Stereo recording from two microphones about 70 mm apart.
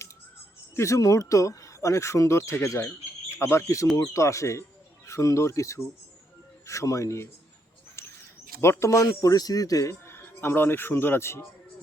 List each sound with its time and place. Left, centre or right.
0.8 s speech: left
8.0 s bird: left
8.6 s speech: left
9.3 s speech: left
9.9 s speech: left